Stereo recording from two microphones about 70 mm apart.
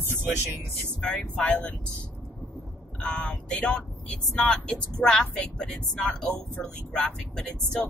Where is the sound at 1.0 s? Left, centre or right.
Centre.